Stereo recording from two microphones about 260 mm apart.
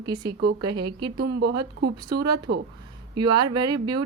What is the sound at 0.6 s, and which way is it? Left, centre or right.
Speech, centre.